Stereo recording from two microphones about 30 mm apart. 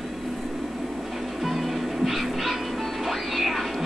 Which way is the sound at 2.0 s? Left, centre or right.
Centre.